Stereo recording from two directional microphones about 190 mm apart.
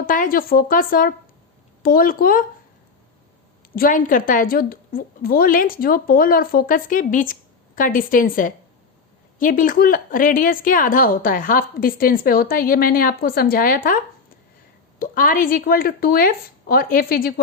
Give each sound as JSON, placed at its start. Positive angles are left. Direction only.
{"t": 0.0, "sound": "speech", "side_deg": 45}
{"t": 3.8, "sound": "speech", "side_deg": 45}